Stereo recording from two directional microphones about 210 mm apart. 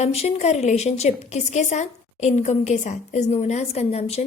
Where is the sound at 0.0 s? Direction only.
30° left (ahead or behind).